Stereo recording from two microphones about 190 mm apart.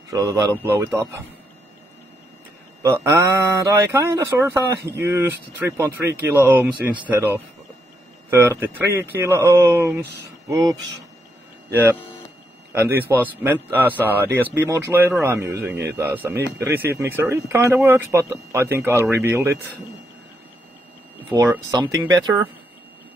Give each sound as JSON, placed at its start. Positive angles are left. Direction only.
{"t": 0.1, "sound": "speech", "side_deg": -20}
{"t": 2.8, "sound": "speech", "side_deg": -15}
{"t": 8.3, "sound": "speech", "side_deg": -10}
{"t": 12.7, "sound": "speech", "side_deg": -10}
{"t": 21.3, "sound": "speech", "side_deg": -15}